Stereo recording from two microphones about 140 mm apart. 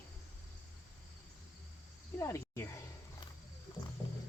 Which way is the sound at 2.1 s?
20° left (ahead or behind).